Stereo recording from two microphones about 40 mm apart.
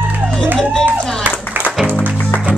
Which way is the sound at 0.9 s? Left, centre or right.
Right.